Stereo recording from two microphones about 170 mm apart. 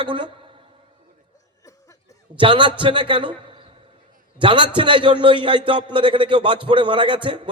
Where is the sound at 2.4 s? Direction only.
30° right (ahead or behind).